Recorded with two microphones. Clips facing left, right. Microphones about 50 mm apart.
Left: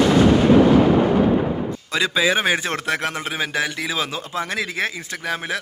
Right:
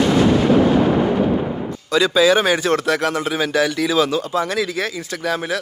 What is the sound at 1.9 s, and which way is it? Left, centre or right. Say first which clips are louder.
Speech: right 5 dB; left.